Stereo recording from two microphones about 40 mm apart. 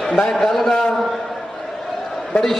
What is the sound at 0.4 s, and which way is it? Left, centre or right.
Speech, centre.